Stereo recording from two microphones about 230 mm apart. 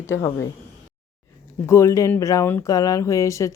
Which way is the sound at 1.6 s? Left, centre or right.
Centre.